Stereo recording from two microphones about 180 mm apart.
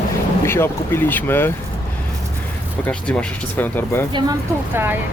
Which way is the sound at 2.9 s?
5° left (ahead or behind).